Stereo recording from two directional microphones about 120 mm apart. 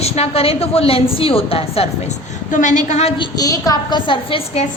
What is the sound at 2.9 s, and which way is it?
Speech, 65° left (ahead or behind).